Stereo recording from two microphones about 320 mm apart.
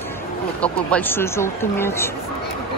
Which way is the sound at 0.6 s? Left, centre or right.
Centre.